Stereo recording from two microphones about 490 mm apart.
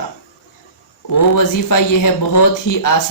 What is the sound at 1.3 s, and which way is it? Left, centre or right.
Speech, left.